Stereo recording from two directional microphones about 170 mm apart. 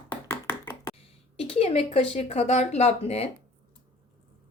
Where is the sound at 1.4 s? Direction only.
35° left (ahead or behind).